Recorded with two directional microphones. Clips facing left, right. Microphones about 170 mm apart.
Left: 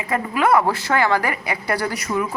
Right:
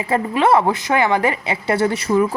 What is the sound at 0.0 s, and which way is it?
A woman's voice, 30° right (ahead or behind).